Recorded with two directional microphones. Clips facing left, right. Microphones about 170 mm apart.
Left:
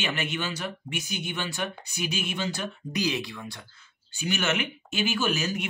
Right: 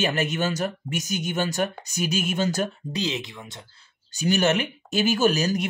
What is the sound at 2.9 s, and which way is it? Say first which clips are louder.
Speech: even; 25° right (ahead or behind).